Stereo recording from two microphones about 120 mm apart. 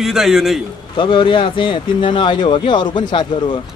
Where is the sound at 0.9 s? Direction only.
45° left (ahead or behind).